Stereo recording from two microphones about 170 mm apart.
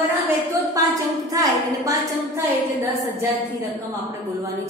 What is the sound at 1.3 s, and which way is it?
Speech, 20° right (ahead or behind).